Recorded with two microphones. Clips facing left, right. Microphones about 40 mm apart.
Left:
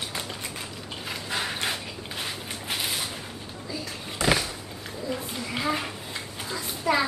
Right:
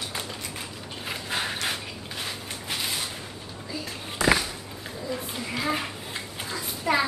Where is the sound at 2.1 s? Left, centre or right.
Centre.